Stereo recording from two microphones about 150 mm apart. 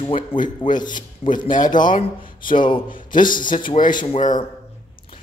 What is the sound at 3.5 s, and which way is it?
Speech, 60° left (ahead or behind).